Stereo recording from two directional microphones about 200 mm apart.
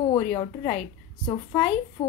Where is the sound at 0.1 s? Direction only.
20° left (ahead or behind).